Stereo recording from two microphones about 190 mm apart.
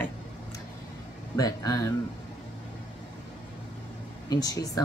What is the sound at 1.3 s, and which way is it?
Speech, 20° left (ahead or behind).